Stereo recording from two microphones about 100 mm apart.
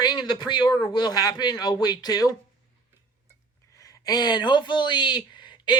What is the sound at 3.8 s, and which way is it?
Speech, 35° left (ahead or behind).